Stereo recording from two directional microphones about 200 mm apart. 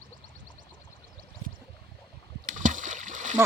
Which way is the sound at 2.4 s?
40° right (ahead or behind).